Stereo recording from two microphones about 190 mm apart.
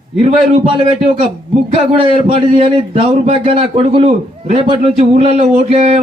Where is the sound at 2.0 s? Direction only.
30° right (ahead or behind).